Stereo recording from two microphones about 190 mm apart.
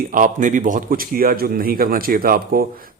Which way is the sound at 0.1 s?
45° right (ahead or behind).